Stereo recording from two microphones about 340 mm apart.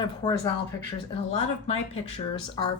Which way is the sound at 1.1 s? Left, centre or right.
Centre.